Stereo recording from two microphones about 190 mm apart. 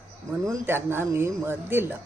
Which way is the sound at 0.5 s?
10° right (ahead or behind).